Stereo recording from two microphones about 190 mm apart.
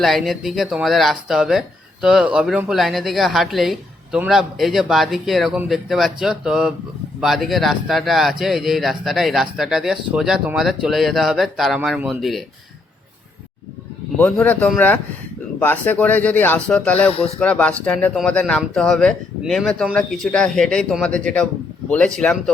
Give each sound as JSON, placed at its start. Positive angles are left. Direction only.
{"t": 0.0, "sound": "speech", "side_deg": 0}
{"t": 14.2, "sound": "speech", "side_deg": 5}
{"t": 17.1, "sound": "speech", "side_deg": 30}
{"t": 17.4, "sound": "speech", "side_deg": 5}